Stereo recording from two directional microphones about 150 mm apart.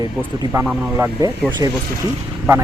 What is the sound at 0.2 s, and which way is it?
Speech, 10° right (ahead or behind).